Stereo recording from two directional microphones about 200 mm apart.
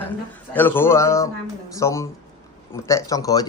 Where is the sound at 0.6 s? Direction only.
10° left (ahead or behind).